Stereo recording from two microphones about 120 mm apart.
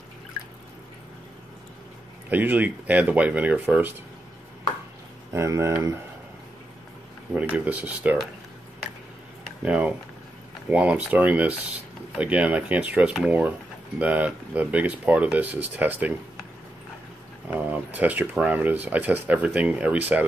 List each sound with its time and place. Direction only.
2.2 s speech: 15° right (ahead or behind)
5.3 s speech: 25° right (ahead or behind)
7.3 s speech: 10° right (ahead or behind)
9.7 s speech: 10° right (ahead or behind)
17.5 s speech: 10° right (ahead or behind)